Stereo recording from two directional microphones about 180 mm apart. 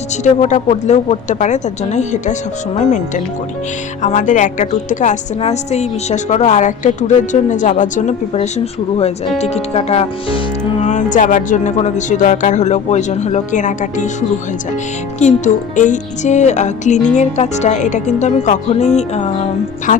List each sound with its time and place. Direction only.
0.4 s a woman's voice: 40° left (ahead or behind)
4.0 s a woman's voice: 45° left (ahead or behind)
10.8 s a woman's voice: 45° left (ahead or behind)